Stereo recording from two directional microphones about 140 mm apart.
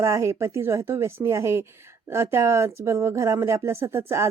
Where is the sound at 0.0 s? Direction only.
20° right (ahead or behind).